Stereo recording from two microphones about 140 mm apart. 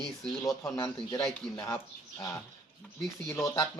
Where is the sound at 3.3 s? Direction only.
20° left (ahead or behind).